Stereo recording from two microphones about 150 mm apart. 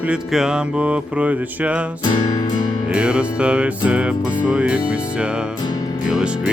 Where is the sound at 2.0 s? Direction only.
30° left (ahead or behind).